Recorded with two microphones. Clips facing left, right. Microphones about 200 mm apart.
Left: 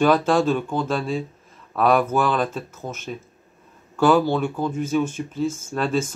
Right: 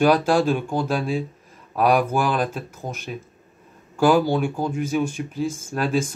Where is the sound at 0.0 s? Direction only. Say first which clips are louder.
Even; 10° right (ahead or behind).